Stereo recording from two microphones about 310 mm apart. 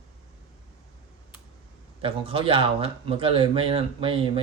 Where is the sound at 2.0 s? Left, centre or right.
Centre.